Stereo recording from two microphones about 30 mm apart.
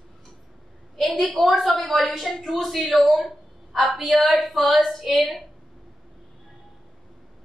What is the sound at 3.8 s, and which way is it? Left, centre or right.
Speech, centre.